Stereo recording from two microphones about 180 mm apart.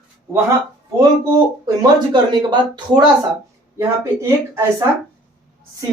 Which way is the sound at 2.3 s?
25° right (ahead or behind).